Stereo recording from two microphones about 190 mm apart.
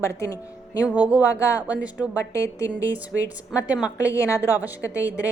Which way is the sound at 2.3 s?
15° left (ahead or behind).